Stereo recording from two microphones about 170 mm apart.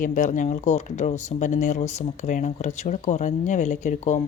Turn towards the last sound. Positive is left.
turn(degrees=45)  # may be behind; listen again after turning